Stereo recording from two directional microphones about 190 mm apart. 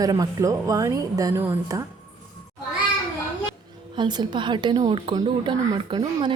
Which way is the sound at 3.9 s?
25° right (ahead or behind).